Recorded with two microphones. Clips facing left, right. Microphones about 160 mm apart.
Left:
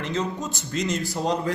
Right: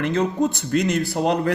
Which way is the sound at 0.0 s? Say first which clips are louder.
Right 7 dB; 55° right (ahead or behind).